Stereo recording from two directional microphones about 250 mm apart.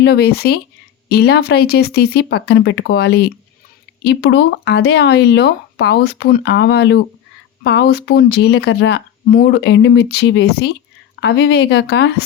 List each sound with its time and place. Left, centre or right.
0.0 s speech: left